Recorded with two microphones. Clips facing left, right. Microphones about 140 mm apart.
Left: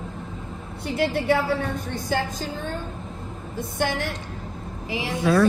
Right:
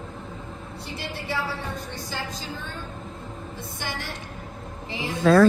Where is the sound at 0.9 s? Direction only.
55° left (ahead or behind).